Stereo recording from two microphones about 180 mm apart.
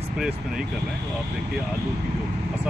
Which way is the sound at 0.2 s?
5° right (ahead or behind).